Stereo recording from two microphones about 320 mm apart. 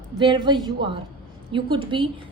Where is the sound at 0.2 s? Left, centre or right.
Centre.